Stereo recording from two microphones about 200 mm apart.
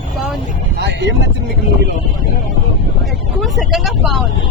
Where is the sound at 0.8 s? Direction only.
55° right (ahead or behind).